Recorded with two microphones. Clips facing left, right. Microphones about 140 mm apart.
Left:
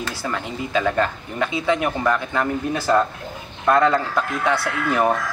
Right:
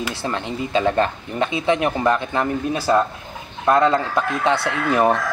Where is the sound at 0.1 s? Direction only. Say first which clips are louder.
Right 2 dB; 25° right (ahead or behind).